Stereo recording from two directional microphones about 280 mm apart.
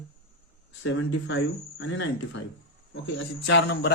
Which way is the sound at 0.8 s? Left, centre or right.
Left.